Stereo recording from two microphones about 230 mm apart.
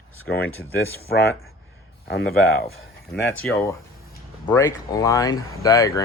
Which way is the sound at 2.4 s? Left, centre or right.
Left.